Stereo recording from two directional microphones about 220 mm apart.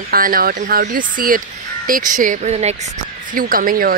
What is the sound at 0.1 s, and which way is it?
Speech, 40° right (ahead or behind).